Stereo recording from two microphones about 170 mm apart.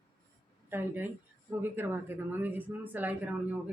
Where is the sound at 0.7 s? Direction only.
10° right (ahead or behind).